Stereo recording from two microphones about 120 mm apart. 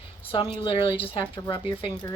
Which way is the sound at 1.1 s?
45° left (ahead or behind).